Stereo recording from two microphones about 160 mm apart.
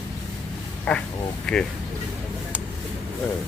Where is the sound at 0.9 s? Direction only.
5° left (ahead or behind).